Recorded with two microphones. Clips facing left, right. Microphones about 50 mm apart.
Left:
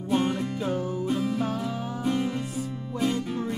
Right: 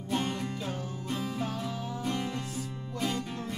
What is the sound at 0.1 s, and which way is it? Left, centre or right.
Music, centre.